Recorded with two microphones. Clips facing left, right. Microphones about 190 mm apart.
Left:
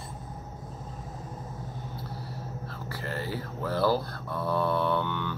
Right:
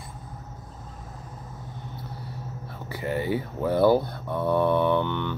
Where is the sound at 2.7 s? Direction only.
20° right (ahead or behind).